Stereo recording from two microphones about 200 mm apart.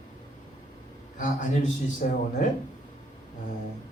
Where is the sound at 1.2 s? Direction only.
40° left (ahead or behind).